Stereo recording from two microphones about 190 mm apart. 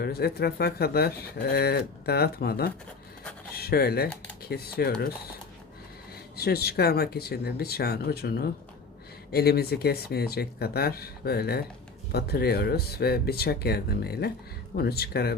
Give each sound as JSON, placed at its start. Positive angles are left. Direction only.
{"t": 0.0, "sound": "speech", "side_deg": 55}
{"t": 6.3, "sound": "speech", "side_deg": 55}